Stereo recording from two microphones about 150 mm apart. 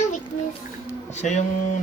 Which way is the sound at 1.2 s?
50° left (ahead or behind).